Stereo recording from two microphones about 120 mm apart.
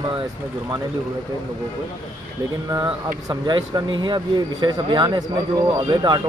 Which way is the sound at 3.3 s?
35° right (ahead or behind).